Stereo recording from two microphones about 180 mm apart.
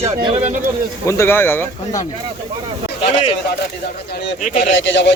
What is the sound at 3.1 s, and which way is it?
Speech, 30° left (ahead or behind).